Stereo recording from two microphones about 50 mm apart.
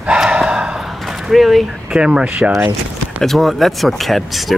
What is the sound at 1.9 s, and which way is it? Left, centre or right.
Speech, right.